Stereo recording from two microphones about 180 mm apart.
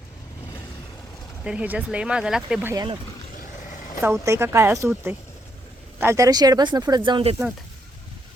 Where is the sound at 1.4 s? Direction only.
5° right (ahead or behind).